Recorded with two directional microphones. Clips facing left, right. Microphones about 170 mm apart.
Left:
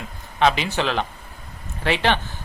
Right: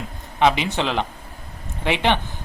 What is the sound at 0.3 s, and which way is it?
Speech, 15° right (ahead or behind).